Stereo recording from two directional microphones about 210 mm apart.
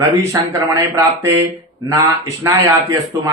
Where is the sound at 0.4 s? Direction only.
15° right (ahead or behind).